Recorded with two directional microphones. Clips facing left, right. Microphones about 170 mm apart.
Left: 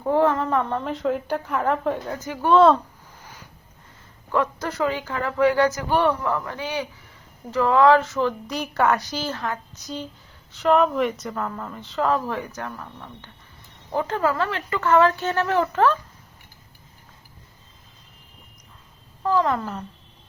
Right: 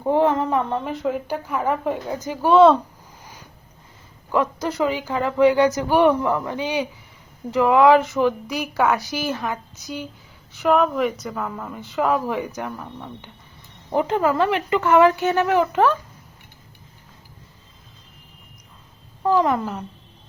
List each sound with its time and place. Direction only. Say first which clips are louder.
0.0 s a woman's voice: right 1 dB; 20° right (ahead or behind)
2.5 s speech: right 2 dB; centre (ahead or behind)
4.3 s a woman's voice: right 2 dB; 15° right (ahead or behind)
19.2 s a woman's voice: right 3 dB; 15° right (ahead or behind)